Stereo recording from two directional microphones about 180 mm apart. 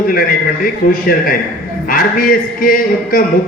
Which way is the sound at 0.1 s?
55° left (ahead or behind).